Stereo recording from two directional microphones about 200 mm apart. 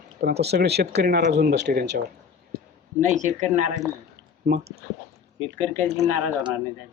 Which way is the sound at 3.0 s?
40° right (ahead or behind).